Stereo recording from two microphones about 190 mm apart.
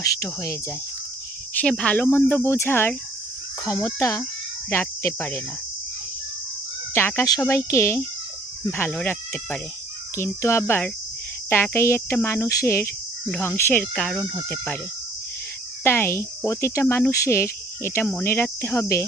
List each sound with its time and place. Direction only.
0.0 s speech: 15° left (ahead or behind)
1.6 s speech: 5° left (ahead or behind)
6.9 s speech: 10° left (ahead or behind)
15.8 s speech: 10° left (ahead or behind)